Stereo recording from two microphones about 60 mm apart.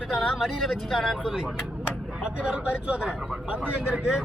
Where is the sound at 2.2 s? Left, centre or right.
Centre.